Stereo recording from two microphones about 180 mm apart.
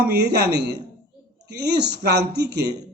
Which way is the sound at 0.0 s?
65° right (ahead or behind).